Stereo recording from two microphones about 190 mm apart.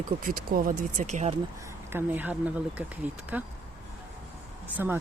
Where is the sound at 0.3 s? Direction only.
50° right (ahead or behind).